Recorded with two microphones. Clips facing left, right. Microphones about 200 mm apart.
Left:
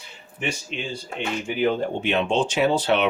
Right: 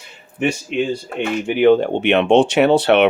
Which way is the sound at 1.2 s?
75° right (ahead or behind).